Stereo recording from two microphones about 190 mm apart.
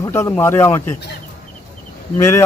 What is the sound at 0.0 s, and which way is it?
Speech, 15° left (ahead or behind).